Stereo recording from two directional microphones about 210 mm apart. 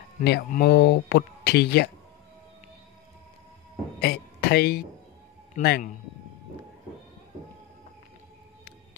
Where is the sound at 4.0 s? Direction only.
50° left (ahead or behind).